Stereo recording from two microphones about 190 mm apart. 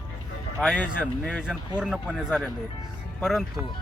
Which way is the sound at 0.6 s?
5° left (ahead or behind).